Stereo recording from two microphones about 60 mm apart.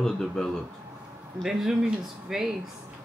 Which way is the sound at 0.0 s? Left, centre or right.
Centre.